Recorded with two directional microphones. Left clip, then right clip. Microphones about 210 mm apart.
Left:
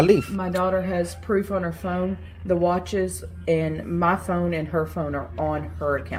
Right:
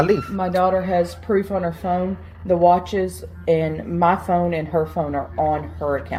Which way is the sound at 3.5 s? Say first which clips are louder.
Right 4 dB; 15° left (ahead or behind).